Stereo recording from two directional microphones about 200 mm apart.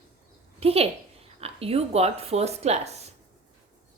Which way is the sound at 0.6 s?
30° right (ahead or behind).